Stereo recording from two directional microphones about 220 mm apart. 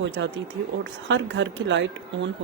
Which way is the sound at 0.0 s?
55° right (ahead or behind).